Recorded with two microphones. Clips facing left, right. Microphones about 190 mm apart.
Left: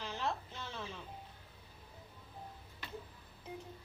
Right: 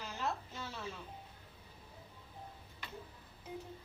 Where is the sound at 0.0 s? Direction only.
5° right (ahead or behind).